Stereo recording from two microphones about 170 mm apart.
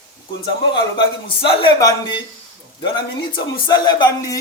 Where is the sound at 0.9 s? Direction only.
30° left (ahead or behind).